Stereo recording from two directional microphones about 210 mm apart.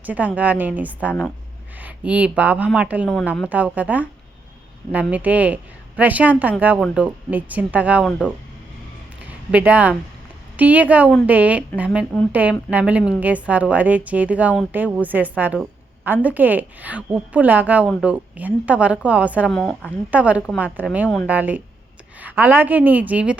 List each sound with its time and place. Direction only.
0.0 s a woman's voice: 5° right (ahead or behind)
9.5 s a woman's voice: 5° right (ahead or behind)
19.5 s a woman's voice: 5° left (ahead or behind)
20.1 s a woman's voice: 5° right (ahead or behind)